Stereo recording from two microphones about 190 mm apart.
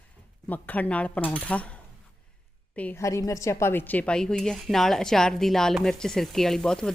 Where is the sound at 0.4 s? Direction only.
10° left (ahead or behind).